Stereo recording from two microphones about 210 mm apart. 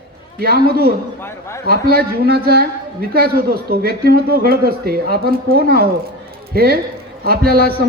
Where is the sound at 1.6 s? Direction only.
45° right (ahead or behind).